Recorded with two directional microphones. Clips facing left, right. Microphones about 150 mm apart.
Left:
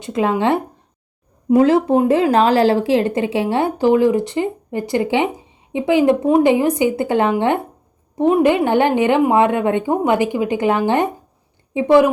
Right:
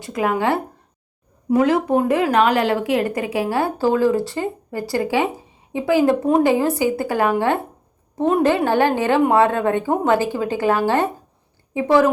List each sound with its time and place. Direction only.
0.0 s a woman's voice: 25° left (ahead or behind)